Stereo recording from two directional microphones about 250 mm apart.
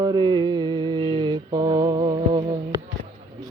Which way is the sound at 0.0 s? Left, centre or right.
Centre.